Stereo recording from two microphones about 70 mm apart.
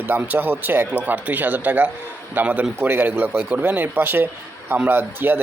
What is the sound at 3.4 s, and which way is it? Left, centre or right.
Speech, centre.